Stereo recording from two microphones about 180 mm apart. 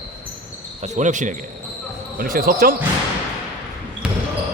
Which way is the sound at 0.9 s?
45° right (ahead or behind).